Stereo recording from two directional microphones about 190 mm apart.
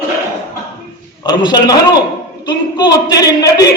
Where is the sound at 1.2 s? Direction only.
20° left (ahead or behind).